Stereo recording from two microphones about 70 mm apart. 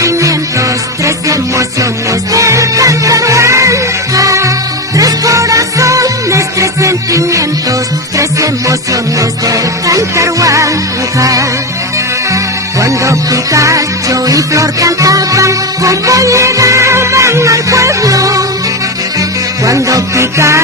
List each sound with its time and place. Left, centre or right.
0.0 s music: right
12.8 s music: right
19.6 s music: right